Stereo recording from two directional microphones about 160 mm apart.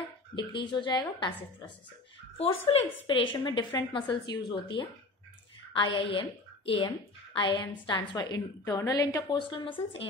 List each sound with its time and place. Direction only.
0.4 s a woman's voice: 30° left (ahead or behind)
2.3 s a woman's voice: 40° left (ahead or behind)